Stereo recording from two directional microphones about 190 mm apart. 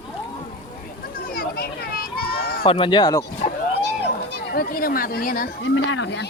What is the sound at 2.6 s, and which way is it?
Speech, 25° left (ahead or behind).